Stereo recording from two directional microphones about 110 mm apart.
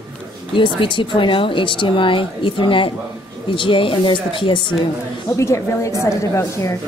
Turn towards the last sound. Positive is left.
turn(degrees=25)  # may be behind; listen again after turning